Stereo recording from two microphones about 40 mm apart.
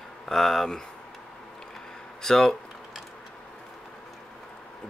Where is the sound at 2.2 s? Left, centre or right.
Centre.